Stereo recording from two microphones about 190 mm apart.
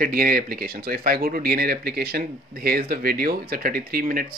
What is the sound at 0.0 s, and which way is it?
Speech, 50° right (ahead or behind).